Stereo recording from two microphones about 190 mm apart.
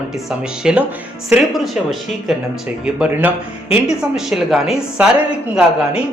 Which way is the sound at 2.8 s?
10° right (ahead or behind).